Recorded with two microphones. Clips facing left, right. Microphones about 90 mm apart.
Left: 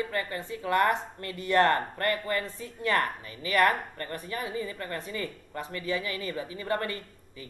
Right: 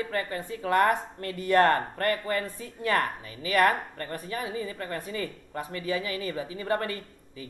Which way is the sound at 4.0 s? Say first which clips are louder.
Right 1 dB; 30° right (ahead or behind).